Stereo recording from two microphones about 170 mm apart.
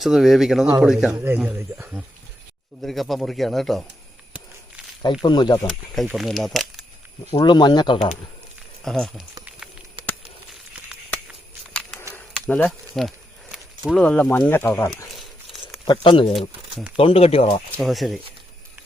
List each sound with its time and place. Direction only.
0.0 s speech: centre (ahead or behind)
2.8 s speech: centre (ahead or behind)
5.2 s speech: 25° left (ahead or behind)
5.6 s speech: centre (ahead or behind)
7.3 s speech: 25° left (ahead or behind)
8.8 s speech: centre (ahead or behind)
12.1 s a sound: 10° left (ahead or behind)
14.0 s speech: 10° left (ahead or behind)
15.9 s speech: 30° left (ahead or behind)
17.7 s speech: centre (ahead or behind)